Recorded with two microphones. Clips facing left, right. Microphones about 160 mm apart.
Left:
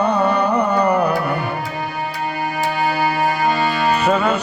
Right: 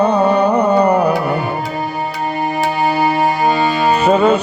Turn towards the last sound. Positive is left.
turn(degrees=-20)  # may be behind; listen again after turning